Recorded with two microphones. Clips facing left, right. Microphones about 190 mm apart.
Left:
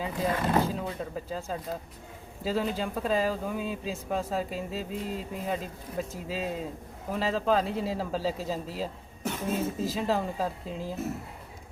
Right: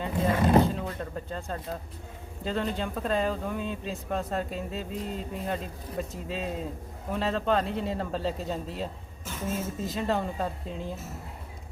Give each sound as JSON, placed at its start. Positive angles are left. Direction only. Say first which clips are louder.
{"t": 0.0, "sound": "speech", "louder": "right 3 dB", "side_deg": 0}
{"t": 9.2, "sound": "a woman's voice", "louder": "left 3 dB", "side_deg": 65}
{"t": 9.6, "sound": "speech", "louder": "left 2 dB", "side_deg": 0}